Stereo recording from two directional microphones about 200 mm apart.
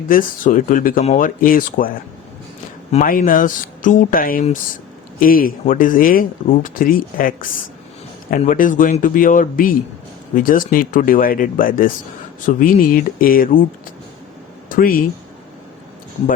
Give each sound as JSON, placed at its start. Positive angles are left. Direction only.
{"t": 0.1, "sound": "speech", "side_deg": 45}
{"t": 2.9, "sound": "speech", "side_deg": 45}
{"t": 14.7, "sound": "speech", "side_deg": 45}